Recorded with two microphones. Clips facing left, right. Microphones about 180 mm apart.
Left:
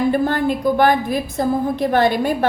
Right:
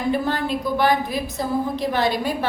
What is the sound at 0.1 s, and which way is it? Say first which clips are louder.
A woman's voice: left 4 dB; 50° left (ahead or behind).